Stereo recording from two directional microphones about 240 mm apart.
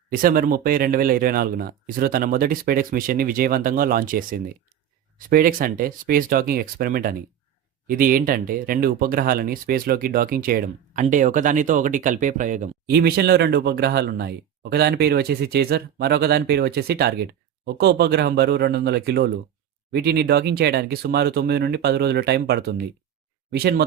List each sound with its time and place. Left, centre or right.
0.1 s speech: right